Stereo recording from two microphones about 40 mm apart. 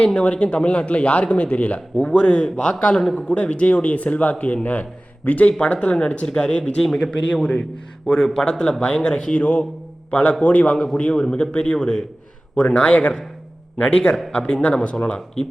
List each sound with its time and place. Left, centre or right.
0.0 s speech: left
2.0 s a man's voice: left
5.5 s a man's voice: left